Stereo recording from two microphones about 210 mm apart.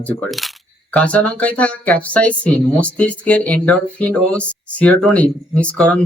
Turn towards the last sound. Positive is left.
turn(degrees=5)  # may be behind; listen again after turning